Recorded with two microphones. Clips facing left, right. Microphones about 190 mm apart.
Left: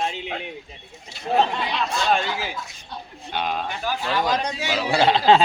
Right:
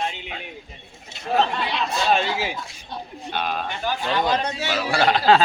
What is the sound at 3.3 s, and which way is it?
Speech, 15° left (ahead or behind).